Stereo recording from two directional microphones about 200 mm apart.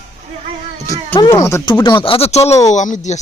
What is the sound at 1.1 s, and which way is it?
Speech, 15° left (ahead or behind).